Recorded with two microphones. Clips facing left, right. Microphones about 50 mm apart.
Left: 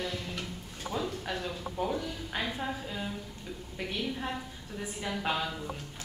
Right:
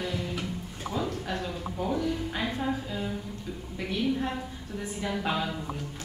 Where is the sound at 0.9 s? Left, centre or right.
Centre.